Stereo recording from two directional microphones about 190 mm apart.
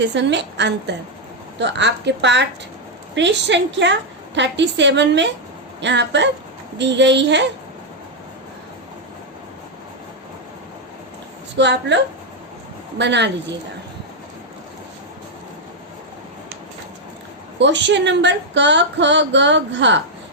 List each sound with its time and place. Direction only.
0.0 s speech: 65° right (ahead or behind)
11.5 s speech: 65° right (ahead or behind)
13.0 s speech: 65° right (ahead or behind)
17.6 s speech: 70° right (ahead or behind)